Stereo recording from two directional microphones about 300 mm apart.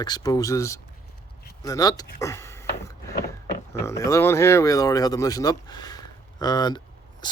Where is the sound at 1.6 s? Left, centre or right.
Centre.